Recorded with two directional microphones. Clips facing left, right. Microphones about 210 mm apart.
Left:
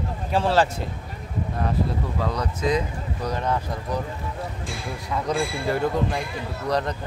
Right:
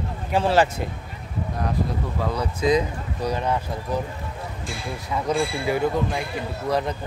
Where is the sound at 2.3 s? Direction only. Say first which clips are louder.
Right 4 dB; 10° right (ahead or behind).